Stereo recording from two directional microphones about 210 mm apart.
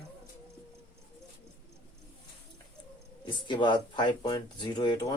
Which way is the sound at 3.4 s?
20° left (ahead or behind).